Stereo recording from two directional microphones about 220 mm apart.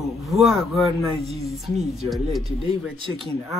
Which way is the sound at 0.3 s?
Centre (ahead or behind).